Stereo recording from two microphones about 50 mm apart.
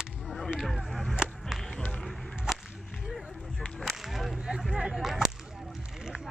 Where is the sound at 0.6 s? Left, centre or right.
Centre.